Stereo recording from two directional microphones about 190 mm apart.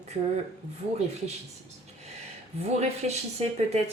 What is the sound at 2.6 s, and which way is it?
Speech, 35° right (ahead or behind).